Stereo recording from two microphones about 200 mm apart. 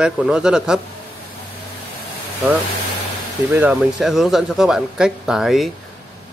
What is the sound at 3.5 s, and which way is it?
Speech, 10° right (ahead or behind).